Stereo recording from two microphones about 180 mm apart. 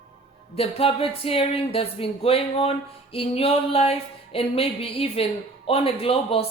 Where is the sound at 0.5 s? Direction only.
30° left (ahead or behind).